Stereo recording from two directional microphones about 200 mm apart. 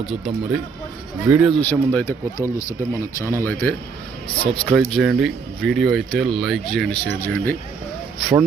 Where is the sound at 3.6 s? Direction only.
10° left (ahead or behind).